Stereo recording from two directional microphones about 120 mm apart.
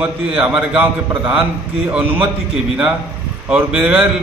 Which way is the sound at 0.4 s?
10° right (ahead or behind).